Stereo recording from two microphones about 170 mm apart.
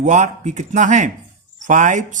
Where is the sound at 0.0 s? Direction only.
45° right (ahead or behind).